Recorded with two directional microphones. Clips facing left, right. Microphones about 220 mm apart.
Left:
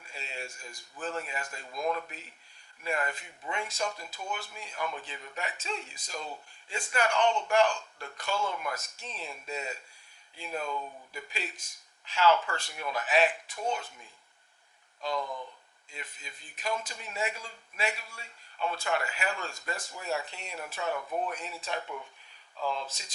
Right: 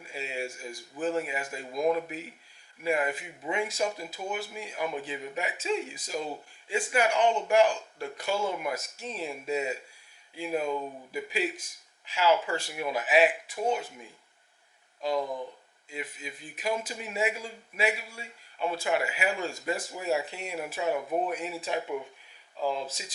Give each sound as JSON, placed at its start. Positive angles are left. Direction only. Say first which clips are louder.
{"t": 0.0, "sound": "speech", "louder": "right 7 dB", "side_deg": -10}
{"t": 15.2, "sound": "speech", "louder": "right 5 dB", "side_deg": -35}
{"t": 15.9, "sound": "speech", "louder": "right 9 dB", "side_deg": -5}